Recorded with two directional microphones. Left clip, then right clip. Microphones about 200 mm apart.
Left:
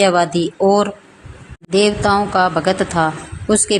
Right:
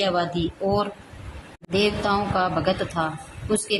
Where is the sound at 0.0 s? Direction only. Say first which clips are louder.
Left 9 dB; 25° left (ahead or behind).